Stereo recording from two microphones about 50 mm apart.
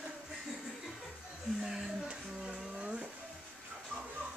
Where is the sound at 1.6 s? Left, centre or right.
Centre.